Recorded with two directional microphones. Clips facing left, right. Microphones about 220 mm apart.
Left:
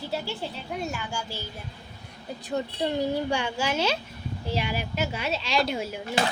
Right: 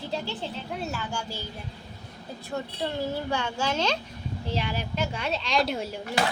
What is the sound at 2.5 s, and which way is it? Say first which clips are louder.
A woman's voice: left 4 dB; 20° left (ahead or behind).